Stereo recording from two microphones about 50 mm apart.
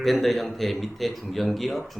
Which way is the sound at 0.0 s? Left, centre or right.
Centre.